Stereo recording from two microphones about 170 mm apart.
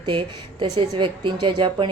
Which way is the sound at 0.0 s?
30° right (ahead or behind).